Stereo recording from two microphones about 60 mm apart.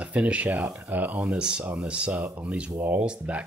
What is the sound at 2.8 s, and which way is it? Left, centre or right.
Speech, right.